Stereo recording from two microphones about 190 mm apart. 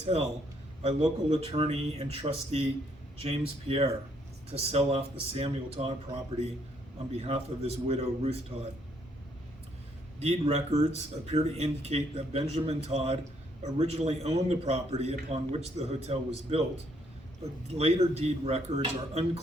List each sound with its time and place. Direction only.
0.0 s a man's voice: 35° right (ahead or behind)
7.2 s a man's voice: 35° right (ahead or behind)
10.2 s a man's voice: 35° right (ahead or behind)
17.7 s a man's voice: 35° right (ahead or behind)